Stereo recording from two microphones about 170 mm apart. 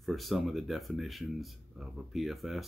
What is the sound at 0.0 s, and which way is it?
Speech, centre (ahead or behind).